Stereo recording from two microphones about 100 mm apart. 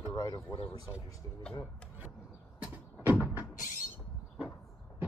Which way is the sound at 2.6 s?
15° right (ahead or behind).